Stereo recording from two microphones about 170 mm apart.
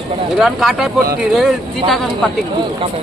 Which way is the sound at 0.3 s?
Centre (ahead or behind).